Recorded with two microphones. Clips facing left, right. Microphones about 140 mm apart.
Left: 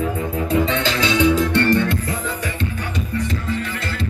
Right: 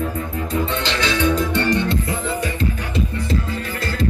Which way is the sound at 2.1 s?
30° right (ahead or behind).